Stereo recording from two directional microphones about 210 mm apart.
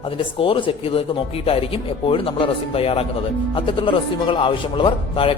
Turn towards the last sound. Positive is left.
turn(degrees=25)  # may be behind; listen again after turning